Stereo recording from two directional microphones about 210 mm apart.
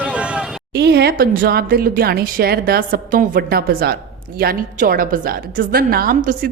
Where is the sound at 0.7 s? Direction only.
50° right (ahead or behind).